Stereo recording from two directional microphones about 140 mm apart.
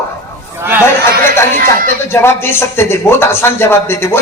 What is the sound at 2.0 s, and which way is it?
A man's voice, 15° left (ahead or behind).